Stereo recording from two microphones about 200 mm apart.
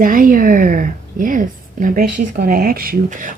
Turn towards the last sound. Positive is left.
turn(degrees=-40)  # may be behind; listen again after turning